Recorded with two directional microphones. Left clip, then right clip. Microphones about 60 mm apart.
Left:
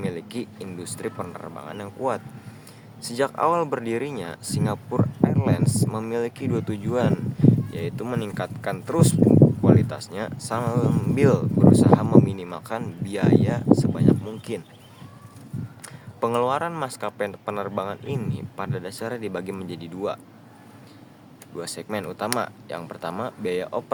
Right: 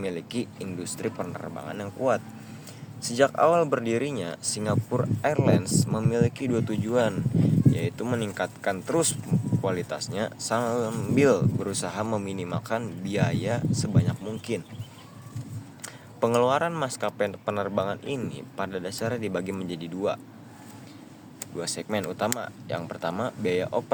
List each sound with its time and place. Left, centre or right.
0.0 s speech: centre
3.0 s speech: centre
5.9 s speech: centre
16.2 s speech: centre
21.6 s speech: centre